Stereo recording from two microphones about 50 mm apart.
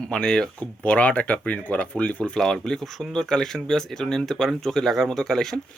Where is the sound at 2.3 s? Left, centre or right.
Centre.